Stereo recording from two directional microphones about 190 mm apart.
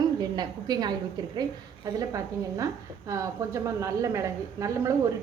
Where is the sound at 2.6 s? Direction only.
15° right (ahead or behind).